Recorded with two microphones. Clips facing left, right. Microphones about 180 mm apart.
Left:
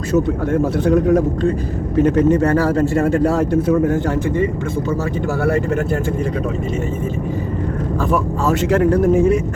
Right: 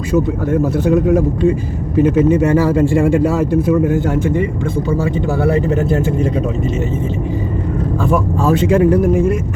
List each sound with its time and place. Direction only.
0.5 s speech: 5° right (ahead or behind)
8.4 s speech: 10° right (ahead or behind)